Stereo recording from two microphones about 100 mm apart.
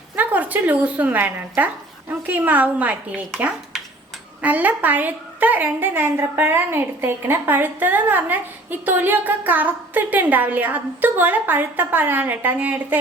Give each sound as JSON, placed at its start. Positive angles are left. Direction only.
{"t": 0.2, "sound": "speech", "side_deg": -15}
{"t": 4.4, "sound": "a woman's voice", "side_deg": -15}